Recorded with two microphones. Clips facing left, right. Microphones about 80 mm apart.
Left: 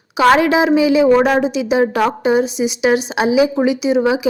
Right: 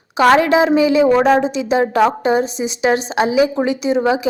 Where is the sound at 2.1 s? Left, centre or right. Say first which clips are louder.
Left 1 dB; centre.